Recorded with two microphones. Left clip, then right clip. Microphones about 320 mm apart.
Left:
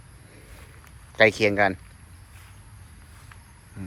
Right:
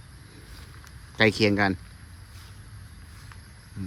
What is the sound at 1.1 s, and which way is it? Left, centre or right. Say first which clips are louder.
Speech: left 3 dB; centre.